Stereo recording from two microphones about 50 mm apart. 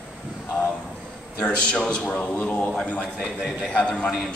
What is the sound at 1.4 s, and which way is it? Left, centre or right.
A man's voice, left.